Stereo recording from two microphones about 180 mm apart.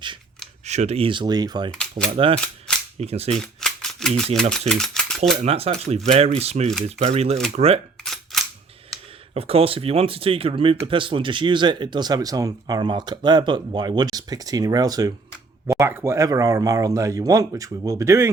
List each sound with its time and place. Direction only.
0.6 s speech: 40° right (ahead or behind); by 1.7 s 20° right (ahead or behind)
1.7 s coin: 5° left (ahead or behind)
2.1 s speech: 30° right (ahead or behind)
3.4 s typewriter: 5° left (ahead or behind)
4.7 s speech: 5° left (ahead or behind)
5.4 s speech: 35° right (ahead or behind)
8.0 s a sound: centre (ahead or behind)
9.3 s speech: 35° right (ahead or behind); by 18.3 s 15° right (ahead or behind)